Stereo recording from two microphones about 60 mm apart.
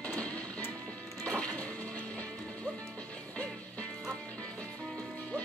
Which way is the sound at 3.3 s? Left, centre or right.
Left.